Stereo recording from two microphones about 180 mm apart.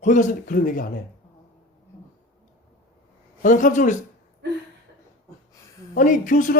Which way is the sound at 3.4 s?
45° left (ahead or behind).